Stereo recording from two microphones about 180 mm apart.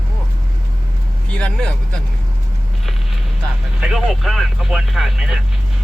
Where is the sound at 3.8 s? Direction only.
5° right (ahead or behind).